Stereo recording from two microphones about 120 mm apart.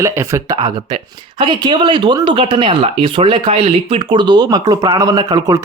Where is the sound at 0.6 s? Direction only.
40° right (ahead or behind).